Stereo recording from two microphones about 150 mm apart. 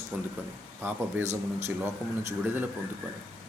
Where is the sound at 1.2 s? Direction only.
45° right (ahead or behind).